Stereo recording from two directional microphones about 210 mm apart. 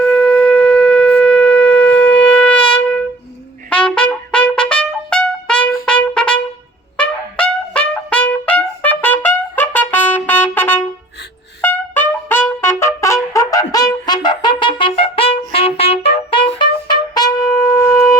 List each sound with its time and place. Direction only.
0.0 s shofar: 5° left (ahead or behind)
3.7 s trumpet: 5° left (ahead or behind)
13.3 s brass instrument: 15° left (ahead or behind)